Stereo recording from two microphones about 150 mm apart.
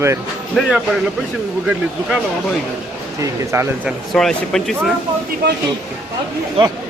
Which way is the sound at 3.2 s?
20° right (ahead or behind).